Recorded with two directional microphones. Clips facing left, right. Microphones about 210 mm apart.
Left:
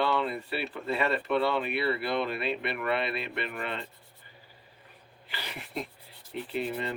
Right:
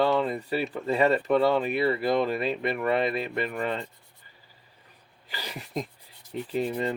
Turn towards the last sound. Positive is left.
turn(degrees=-40)  # may be behind; listen again after turning